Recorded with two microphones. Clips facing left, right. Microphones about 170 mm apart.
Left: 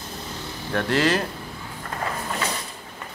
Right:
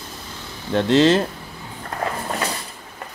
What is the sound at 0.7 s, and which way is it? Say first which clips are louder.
Speech: right 6 dB; 20° right (ahead or behind).